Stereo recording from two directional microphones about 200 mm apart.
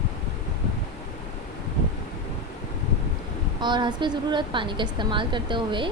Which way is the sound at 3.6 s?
20° right (ahead or behind).